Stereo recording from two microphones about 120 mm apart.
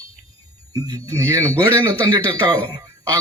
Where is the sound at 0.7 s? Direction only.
30° right (ahead or behind).